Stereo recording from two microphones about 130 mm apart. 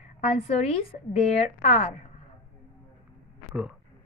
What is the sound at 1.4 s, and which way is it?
Speech, 65° left (ahead or behind).